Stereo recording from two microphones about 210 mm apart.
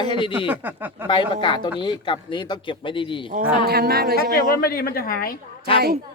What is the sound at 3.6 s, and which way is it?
Speech, 45° right (ahead or behind).